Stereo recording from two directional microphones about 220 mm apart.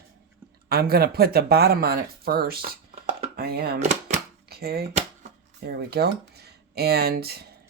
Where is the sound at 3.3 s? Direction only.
45° right (ahead or behind).